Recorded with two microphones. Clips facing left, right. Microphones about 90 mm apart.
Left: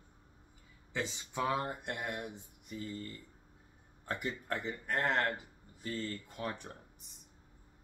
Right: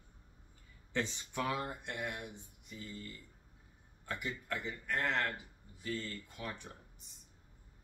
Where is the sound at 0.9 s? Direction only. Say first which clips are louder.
Left 1 dB; 15° left (ahead or behind).